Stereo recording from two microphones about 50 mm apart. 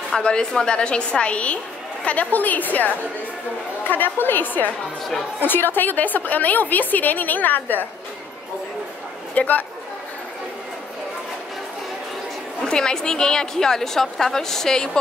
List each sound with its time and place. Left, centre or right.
0.2 s a woman's voice: centre; by 7.8 s left
9.3 s a woman's voice: left
12.6 s a woman's voice: centre